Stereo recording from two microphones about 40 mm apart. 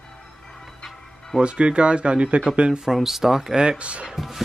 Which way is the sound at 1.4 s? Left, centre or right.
Right.